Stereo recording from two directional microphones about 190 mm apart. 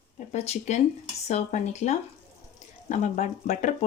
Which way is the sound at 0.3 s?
35° left (ahead or behind).